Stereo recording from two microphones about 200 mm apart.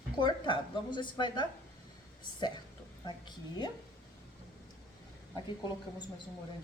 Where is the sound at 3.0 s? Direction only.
20° left (ahead or behind).